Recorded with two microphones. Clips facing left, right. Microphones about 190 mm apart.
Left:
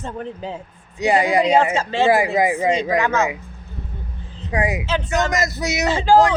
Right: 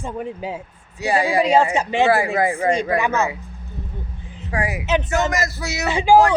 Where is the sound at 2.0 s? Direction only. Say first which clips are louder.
Left 1 dB; 15° left (ahead or behind).